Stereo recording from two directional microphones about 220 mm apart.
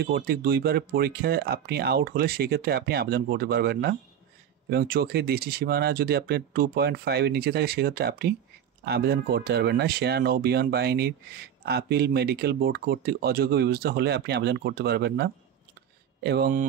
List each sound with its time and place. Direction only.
0.0 s speech: 45° right (ahead or behind)